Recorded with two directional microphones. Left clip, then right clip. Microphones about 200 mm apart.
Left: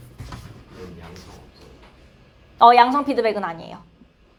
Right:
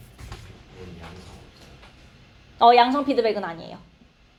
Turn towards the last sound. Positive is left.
turn(degrees=10)  # may be behind; listen again after turning